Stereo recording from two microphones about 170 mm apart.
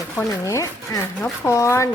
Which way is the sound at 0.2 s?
20° left (ahead or behind).